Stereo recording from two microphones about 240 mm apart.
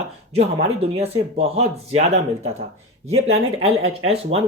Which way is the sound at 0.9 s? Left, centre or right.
Right.